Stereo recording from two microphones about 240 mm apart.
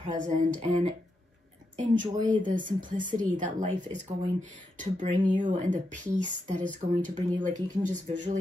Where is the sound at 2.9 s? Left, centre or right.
Right.